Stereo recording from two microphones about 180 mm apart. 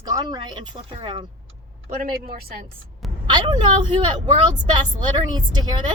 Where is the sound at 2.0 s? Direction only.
55° right (ahead or behind).